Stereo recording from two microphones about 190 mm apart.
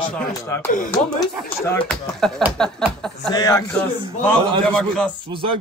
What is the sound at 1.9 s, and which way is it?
Speech, centre (ahead or behind).